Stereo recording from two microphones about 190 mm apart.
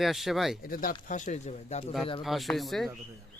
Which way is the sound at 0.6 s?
50° left (ahead or behind).